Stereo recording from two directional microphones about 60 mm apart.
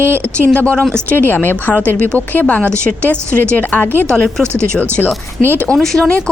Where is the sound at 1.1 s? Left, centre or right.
Left.